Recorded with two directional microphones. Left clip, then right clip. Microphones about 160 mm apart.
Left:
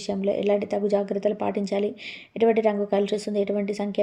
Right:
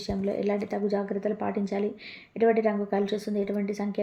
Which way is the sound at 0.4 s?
35° left (ahead or behind).